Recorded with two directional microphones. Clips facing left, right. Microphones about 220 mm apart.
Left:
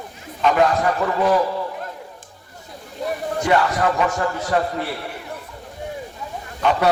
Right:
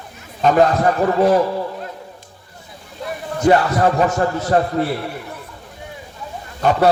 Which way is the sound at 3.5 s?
40° right (ahead or behind).